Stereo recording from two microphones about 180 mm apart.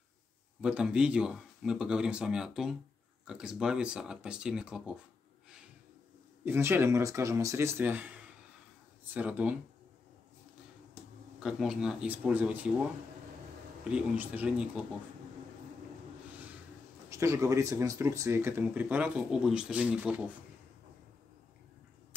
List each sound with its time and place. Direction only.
0.6 s speech: 5° right (ahead or behind)
6.4 s speech: 15° right (ahead or behind)
11.3 s speech: 5° right (ahead or behind)
13.8 s speech: 5° right (ahead or behind)
17.1 s speech: 15° right (ahead or behind)